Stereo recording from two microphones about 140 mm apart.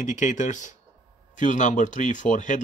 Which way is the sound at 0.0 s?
60° left (ahead or behind).